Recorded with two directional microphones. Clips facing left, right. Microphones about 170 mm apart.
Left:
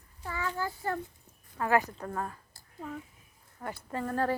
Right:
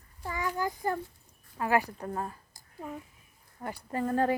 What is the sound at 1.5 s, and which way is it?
Speech, 15° right (ahead or behind).